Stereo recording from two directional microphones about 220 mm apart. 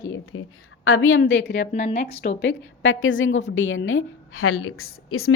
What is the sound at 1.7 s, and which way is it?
Speech, 30° left (ahead or behind).